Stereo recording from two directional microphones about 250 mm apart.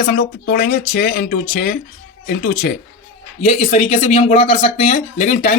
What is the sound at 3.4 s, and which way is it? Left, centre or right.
A man's voice, left.